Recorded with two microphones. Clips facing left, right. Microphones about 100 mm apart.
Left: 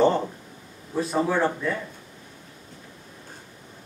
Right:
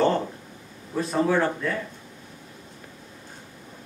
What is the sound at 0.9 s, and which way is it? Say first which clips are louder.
Speech: right 1 dB; centre (ahead or behind).